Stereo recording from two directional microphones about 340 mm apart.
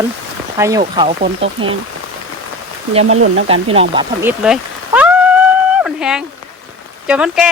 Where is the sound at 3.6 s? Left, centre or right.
Centre.